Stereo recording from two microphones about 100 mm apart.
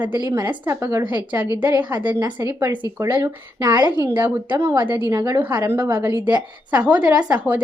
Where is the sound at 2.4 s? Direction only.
35° right (ahead or behind).